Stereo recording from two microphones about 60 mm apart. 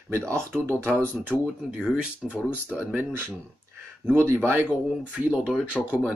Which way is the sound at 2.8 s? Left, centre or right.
Right.